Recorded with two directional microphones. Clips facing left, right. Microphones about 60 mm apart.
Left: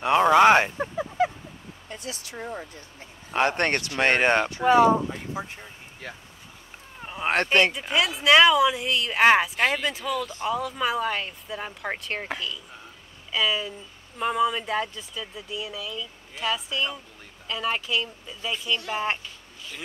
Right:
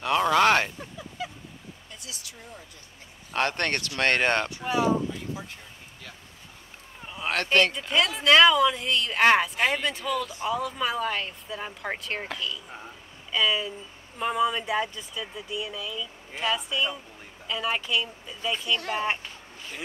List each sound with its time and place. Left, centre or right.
0.0 s speech: left
0.7 s a sound: left
1.9 s speech: left
2.3 s speech: left
3.3 s speech: centre
4.5 s speech: left
5.1 s speech: left
7.7 s speech: centre
13.3 s speech: centre